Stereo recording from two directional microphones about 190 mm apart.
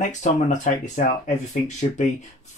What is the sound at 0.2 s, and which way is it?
Speech, 40° left (ahead or behind).